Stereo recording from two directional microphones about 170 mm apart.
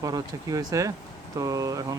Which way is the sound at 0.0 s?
20° right (ahead or behind).